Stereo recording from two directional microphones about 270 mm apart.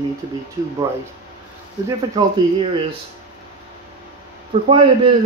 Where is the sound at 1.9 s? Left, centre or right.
Centre.